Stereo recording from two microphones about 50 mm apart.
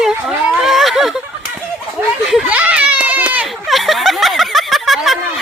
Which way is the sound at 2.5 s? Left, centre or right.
Right.